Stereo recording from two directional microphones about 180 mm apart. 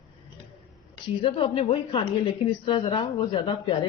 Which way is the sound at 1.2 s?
30° left (ahead or behind).